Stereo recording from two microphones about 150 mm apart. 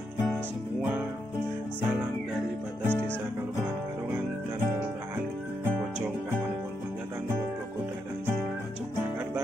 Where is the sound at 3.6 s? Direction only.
15° right (ahead or behind).